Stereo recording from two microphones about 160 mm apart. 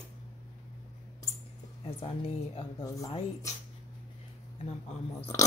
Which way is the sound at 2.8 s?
20° left (ahead or behind).